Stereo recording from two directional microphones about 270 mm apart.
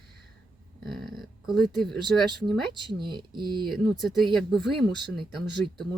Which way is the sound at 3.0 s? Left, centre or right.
Centre.